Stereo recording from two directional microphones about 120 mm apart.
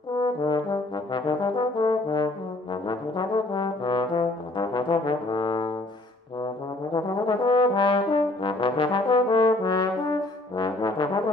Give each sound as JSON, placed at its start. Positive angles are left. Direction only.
{"t": 0.2, "sound": "brass instrument", "side_deg": 35}
{"t": 6.9, "sound": "brass instrument", "side_deg": 40}